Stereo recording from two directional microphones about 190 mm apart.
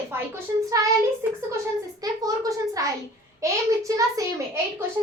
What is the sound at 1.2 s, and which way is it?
Speech, 15° right (ahead or behind).